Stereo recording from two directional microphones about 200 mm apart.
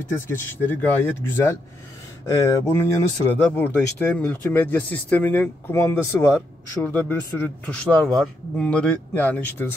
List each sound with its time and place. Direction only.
0.3 s speech: 10° left (ahead or behind)